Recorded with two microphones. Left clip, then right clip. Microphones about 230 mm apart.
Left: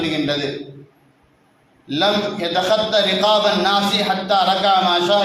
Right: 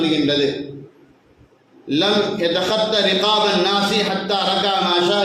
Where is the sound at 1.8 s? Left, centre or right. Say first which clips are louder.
Even; centre.